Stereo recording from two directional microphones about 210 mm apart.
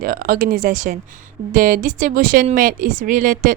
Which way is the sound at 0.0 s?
40° right (ahead or behind).